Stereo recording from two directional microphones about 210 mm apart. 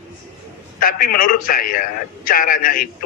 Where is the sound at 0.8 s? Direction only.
45° left (ahead or behind).